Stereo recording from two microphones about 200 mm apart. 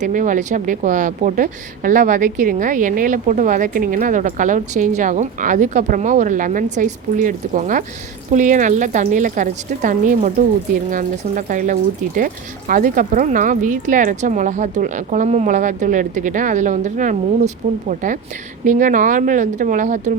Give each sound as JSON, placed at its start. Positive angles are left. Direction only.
{"t": 0.0, "sound": "a woman's voice", "side_deg": -40}